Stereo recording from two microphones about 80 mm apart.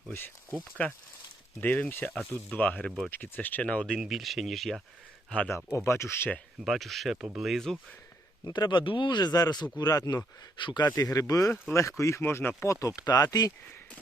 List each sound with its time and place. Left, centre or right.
0.8 s speech: centre
4.0 s speech: centre
5.5 s speech: left
6.7 s speech: centre
8.4 s speech: left
10.6 s speech: left
10.8 s speech: left
12.2 s speech: left
12.6 s speech: left